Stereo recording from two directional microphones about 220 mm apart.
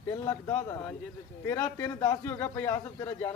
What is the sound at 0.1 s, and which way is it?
Speech, 15° left (ahead or behind).